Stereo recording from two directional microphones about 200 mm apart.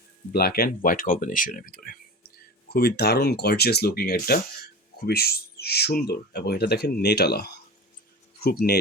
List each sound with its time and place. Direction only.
0.3 s speech: 50° left (ahead or behind)
8.6 s speech: 45° left (ahead or behind)